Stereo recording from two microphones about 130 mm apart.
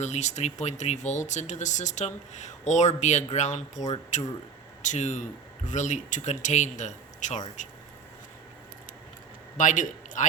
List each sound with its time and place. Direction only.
0.0 s speech: 65° left (ahead or behind)
9.6 s a man's voice: 85° left